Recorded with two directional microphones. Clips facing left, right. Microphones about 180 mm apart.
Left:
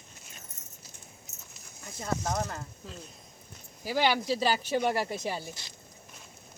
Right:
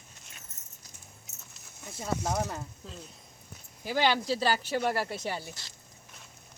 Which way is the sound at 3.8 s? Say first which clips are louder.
Even; 10° left (ahead or behind).